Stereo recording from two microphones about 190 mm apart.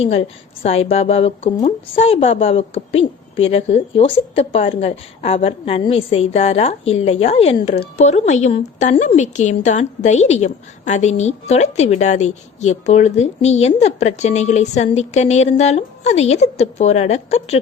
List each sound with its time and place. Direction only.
0.0 s a woman's voice: 30° left (ahead or behind)